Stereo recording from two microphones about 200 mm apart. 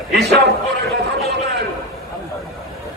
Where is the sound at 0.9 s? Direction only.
60° right (ahead or behind).